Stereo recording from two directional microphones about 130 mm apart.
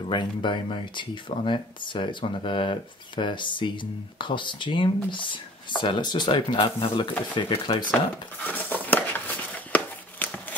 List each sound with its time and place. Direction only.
0.1 s speech: 35° left (ahead or behind)
8.5 s dog: 15° left (ahead or behind)
9.7 s a sound: 15° left (ahead or behind)